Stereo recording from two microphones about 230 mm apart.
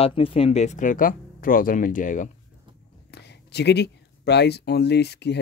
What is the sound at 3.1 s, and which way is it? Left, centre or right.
Speech, left.